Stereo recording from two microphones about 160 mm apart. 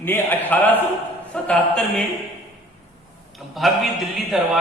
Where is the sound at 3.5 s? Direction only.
Centre (ahead or behind).